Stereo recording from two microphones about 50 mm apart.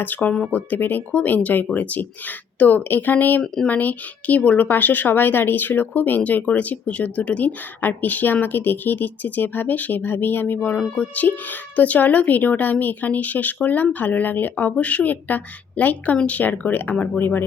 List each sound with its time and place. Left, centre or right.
0.0 s a woman's voice: left
3.4 s speech: centre
3.7 s a woman's voice: left